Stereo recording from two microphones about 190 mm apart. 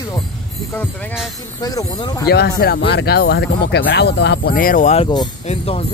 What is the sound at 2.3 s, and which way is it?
Speech, 60° left (ahead or behind).